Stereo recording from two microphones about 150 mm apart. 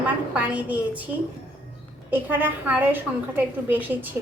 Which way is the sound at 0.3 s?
10° right (ahead or behind).